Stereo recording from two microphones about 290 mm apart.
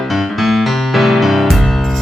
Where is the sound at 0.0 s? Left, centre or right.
Centre.